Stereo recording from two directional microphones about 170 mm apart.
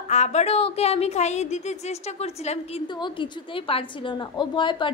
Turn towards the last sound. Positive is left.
turn(degrees=30)  # may be behind; listen again after turning